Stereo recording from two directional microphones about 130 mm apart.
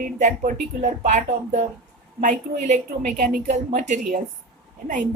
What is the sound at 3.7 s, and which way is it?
Speech, 80° right.